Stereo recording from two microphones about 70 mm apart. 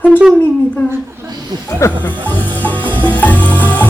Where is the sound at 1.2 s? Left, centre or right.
Right.